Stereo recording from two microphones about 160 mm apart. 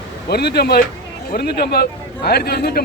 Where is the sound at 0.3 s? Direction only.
85° left.